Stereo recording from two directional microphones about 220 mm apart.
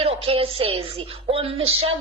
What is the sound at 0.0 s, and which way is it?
A woman's voice, 25° right (ahead or behind).